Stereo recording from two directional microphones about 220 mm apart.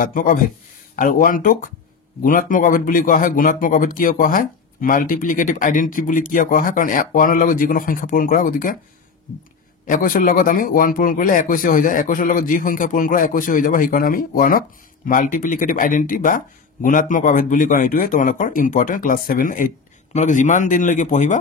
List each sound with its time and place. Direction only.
0.0 s speech: 40° left (ahead or behind)
9.8 s speech: 40° left (ahead or behind)